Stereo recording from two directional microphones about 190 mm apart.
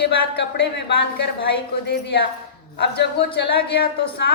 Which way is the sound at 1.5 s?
60° left (ahead or behind).